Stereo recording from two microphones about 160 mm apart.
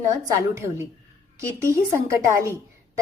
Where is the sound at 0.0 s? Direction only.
20° right (ahead or behind).